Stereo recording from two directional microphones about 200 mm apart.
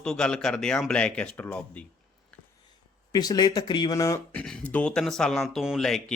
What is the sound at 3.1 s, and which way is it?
Speech, 20° left (ahead or behind).